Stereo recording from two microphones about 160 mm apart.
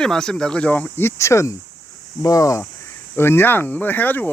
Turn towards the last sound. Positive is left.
turn(degrees=10)  # may be behind; listen again after turning